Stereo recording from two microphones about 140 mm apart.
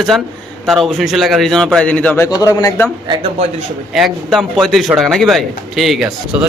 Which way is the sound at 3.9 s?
Centre (ahead or behind).